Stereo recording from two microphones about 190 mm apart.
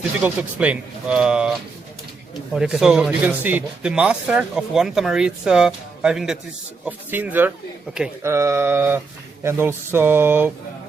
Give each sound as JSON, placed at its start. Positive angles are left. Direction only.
{"t": 0.2, "sound": "speech", "side_deg": -5}